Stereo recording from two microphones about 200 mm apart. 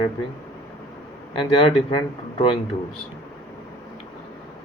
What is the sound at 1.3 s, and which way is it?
Speech, 25° left (ahead or behind).